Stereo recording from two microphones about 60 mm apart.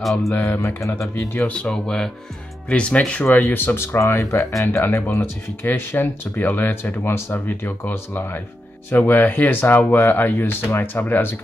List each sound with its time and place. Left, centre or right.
0.0 s speech: centre
0.3 s speech: left
0.7 s speech: left
1.4 s speech: centre
3.3 s speech: left
4.8 s speech: left